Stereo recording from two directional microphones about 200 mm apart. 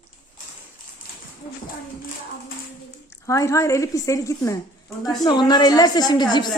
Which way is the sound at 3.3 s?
15° left (ahead or behind).